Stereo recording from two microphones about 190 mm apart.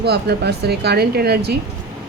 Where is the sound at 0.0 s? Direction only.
60° right (ahead or behind).